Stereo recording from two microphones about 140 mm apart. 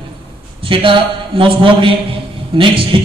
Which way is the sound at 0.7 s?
40° right (ahead or behind).